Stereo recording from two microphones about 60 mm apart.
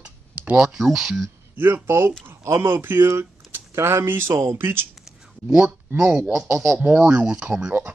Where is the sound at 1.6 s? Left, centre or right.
Right.